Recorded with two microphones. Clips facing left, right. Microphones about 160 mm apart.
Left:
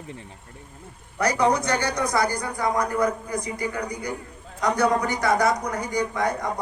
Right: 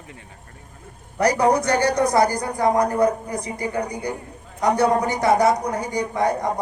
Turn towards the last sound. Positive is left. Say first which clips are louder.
# right 3 dB
turn(degrees=-35)  # may be behind; listen again after turning